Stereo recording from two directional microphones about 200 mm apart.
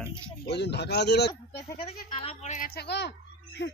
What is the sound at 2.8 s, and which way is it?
Speech, 55° left (ahead or behind).